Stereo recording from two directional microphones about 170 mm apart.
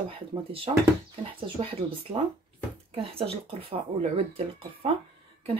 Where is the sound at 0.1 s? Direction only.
35° right (ahead or behind).